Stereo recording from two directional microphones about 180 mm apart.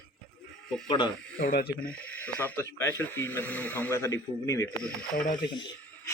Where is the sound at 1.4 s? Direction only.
60° left (ahead or behind).